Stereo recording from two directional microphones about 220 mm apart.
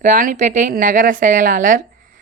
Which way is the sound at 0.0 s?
35° right (ahead or behind).